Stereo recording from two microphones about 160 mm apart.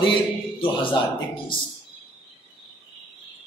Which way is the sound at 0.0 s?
30° left (ahead or behind).